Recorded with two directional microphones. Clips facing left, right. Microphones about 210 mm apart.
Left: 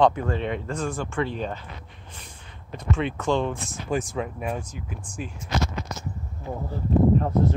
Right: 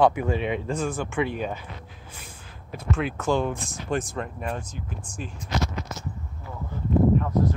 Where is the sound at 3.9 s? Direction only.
5° left (ahead or behind).